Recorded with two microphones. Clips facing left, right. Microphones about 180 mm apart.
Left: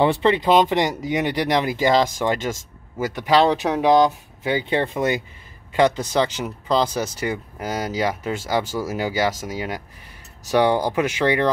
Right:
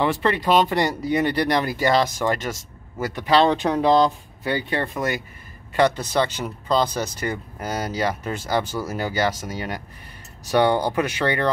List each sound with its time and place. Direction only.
0.0 s speech: 25° left (ahead or behind)